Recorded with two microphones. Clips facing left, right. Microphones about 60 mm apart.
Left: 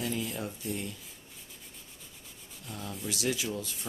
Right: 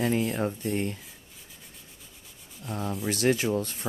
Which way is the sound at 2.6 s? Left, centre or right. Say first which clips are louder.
Right 8 dB; right.